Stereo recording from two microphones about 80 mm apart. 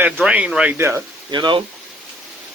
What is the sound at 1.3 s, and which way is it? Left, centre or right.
Speech, right.